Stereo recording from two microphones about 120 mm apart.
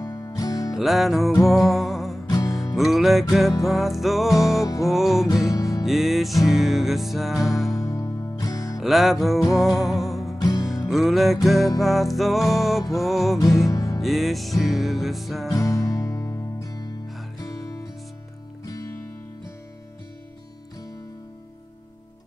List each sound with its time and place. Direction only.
0.0 s music: 30° left (ahead or behind)
0.7 s music: centre (ahead or behind)
2.2 s music: 30° left (ahead or behind)
2.7 s music: centre (ahead or behind)
5.3 s music: 30° left (ahead or behind)
5.9 s music: centre (ahead or behind)
7.7 s music: 25° left (ahead or behind)
8.7 s music: centre (ahead or behind)
13.7 s music: 30° left (ahead or behind)
14.0 s music: centre (ahead or behind)
15.5 s music: 25° left (ahead or behind)